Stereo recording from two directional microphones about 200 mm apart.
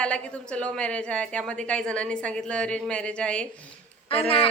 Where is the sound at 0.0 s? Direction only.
5° left (ahead or behind).